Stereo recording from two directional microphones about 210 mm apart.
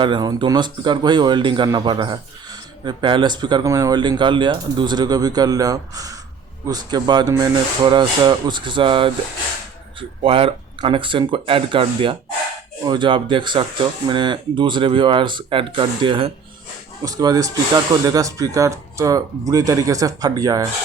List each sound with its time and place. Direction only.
0.0 s speech: 20° right (ahead or behind)